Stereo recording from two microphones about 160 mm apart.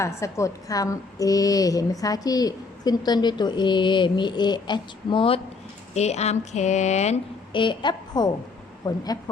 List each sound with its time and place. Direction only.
0.0 s a woman's voice: 20° left (ahead or behind); by 7.2 s 45° left (ahead or behind)
7.5 s a woman's voice: 30° left (ahead or behind)